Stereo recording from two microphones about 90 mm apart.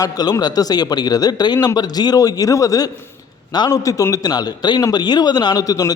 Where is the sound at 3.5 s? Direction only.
55° left (ahead or behind).